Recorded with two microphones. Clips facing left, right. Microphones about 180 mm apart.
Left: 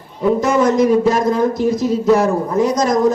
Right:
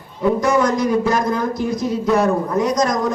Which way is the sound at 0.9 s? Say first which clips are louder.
Left 4 dB; 25° left (ahead or behind).